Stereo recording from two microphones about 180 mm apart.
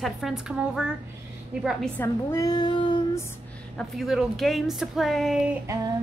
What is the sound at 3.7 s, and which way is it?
A woman's voice, centre (ahead or behind).